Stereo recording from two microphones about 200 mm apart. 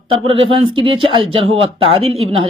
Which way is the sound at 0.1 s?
30° right (ahead or behind).